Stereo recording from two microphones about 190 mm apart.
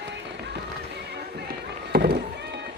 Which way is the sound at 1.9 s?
55° right (ahead or behind).